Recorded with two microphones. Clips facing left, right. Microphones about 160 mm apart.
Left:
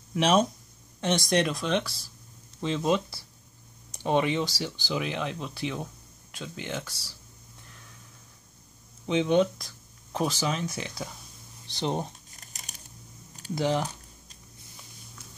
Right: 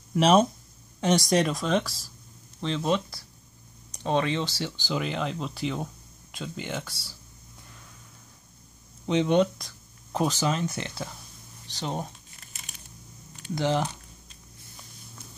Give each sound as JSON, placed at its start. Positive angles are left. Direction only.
{"t": 0.1, "sound": "speech", "side_deg": 0}
{"t": 2.6, "sound": "speech", "side_deg": 15}
{"t": 9.0, "sound": "speech", "side_deg": 0}
{"t": 11.8, "sound": "speech", "side_deg": 20}
{"t": 12.4, "sound": "crumpling", "side_deg": 40}
{"t": 13.6, "sound": "speech", "side_deg": 10}